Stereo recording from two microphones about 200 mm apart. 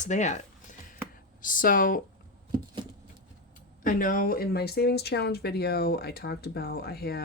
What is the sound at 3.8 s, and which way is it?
Speech, 45° left (ahead or behind).